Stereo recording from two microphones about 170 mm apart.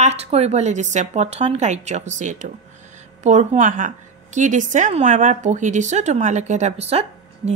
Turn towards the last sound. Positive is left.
turn(degrees=-40)  # may be behind; listen again after turning